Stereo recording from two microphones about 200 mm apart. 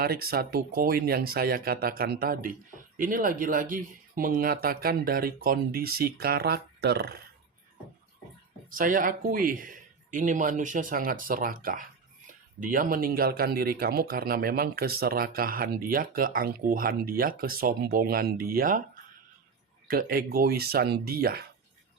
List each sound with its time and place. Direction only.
0.0 s speech: 50° right (ahead or behind)
8.7 s speech: 45° right (ahead or behind)
19.9 s speech: 45° right (ahead or behind)